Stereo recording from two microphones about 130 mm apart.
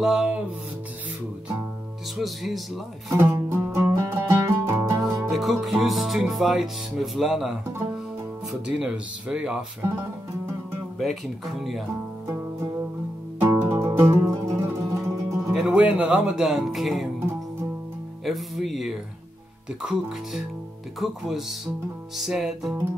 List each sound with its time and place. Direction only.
0.0 s speech: 5° right (ahead or behind)
2.1 s speech: centre (ahead or behind)
3.1 s music: 20° right (ahead or behind)
5.0 s music: centre (ahead or behind)
8.6 s speech: 5° right (ahead or behind)
9.8 s music: 20° right (ahead or behind)
11.0 s speech: centre (ahead or behind)
13.4 s music: 20° right (ahead or behind)
15.5 s speech: 5° right (ahead or behind)
18.2 s speech: centre (ahead or behind)